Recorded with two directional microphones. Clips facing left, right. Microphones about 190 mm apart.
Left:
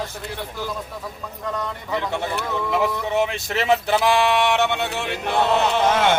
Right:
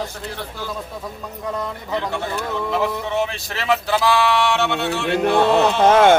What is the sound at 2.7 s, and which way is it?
Speech, 15° left (ahead or behind).